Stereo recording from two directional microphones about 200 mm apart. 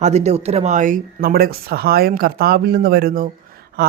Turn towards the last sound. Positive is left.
turn(degrees=-45)  # may be behind; listen again after turning